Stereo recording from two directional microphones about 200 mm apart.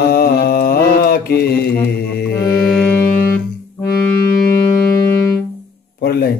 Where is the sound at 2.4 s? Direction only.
15° left (ahead or behind).